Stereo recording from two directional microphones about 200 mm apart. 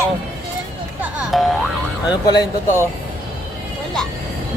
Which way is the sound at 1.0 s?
Centre (ahead or behind).